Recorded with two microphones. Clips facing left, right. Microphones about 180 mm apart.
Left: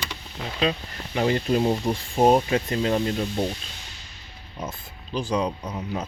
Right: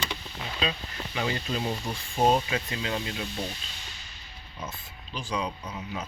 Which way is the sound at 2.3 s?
50° left (ahead or behind).